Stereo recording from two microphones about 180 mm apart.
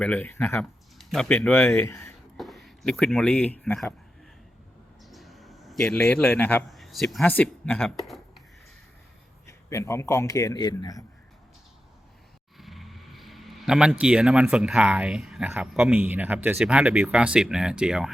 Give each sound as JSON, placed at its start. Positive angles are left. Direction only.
{"t": 0.0, "sound": "a man's voice", "side_deg": 10}
{"t": 1.7, "sound": "speech", "side_deg": 15}
{"t": 2.4, "sound": "speech", "side_deg": 0}
{"t": 5.1, "sound": "a man's voice", "side_deg": 0}
{"t": 9.6, "sound": "a man's voice", "side_deg": 15}
{"t": 12.5, "sound": "speech", "side_deg": 0}